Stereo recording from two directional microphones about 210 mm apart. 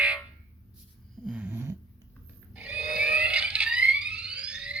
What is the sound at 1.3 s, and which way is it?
Cat, 10° right (ahead or behind).